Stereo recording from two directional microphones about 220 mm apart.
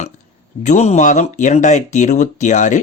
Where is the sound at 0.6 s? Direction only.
30° left (ahead or behind).